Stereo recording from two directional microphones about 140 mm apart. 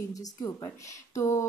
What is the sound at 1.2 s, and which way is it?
Speech, 20° left (ahead or behind).